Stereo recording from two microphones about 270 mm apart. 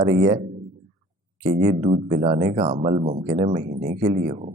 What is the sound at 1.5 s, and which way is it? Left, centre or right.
Speech, right.